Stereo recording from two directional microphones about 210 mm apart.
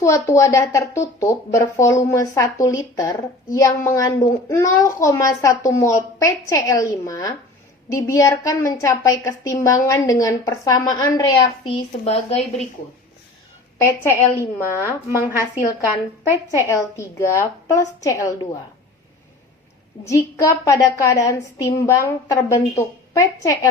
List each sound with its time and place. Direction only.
0.0 s a woman's voice: 15° left (ahead or behind); by 12.6 s 30° left (ahead or behind)
13.7 s a woman's voice: 10° left (ahead or behind)
16.6 s a woman's voice: 15° left (ahead or behind)
20.3 s a woman's voice: 15° left (ahead or behind)